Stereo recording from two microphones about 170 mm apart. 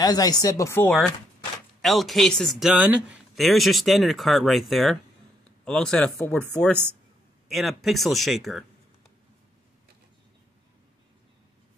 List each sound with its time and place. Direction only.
0.0 s speech: 20° left (ahead or behind)
1.8 s speech: centre (ahead or behind)